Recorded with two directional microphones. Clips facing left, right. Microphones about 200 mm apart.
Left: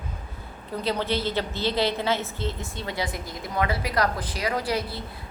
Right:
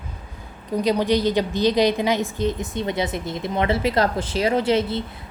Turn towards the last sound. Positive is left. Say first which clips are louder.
# right 8 dB
turn(degrees=-25)  # may be behind; listen again after turning